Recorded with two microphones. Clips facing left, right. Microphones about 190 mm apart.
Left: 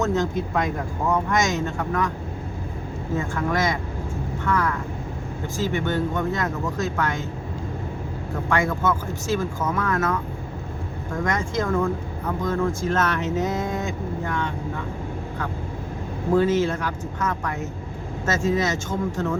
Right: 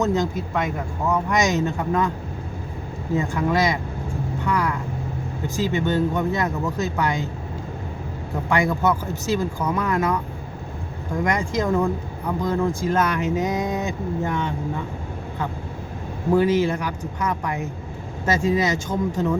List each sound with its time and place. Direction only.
0.0 s speech: 15° right (ahead or behind)
1.3 s speech: 15° right (ahead or behind)
3.2 s speech: 15° right (ahead or behind)
8.4 s speech: 15° right (ahead or behind)
11.2 s speech: 15° right (ahead or behind)
16.3 s speech: 10° right (ahead or behind)